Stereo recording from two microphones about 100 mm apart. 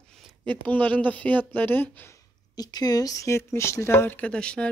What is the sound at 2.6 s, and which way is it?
Speech, 40° left (ahead or behind).